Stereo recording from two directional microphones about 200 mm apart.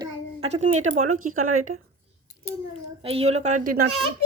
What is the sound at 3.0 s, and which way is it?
Speech, 30° right (ahead or behind).